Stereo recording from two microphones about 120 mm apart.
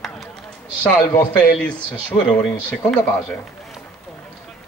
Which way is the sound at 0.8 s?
15° left (ahead or behind).